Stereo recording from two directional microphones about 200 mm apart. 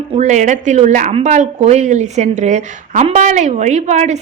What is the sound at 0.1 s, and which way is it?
Speech, 35° right (ahead or behind).